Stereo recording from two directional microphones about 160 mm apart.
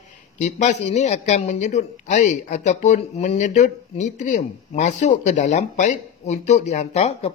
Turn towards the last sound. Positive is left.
turn(degrees=45)  # may be behind; listen again after turning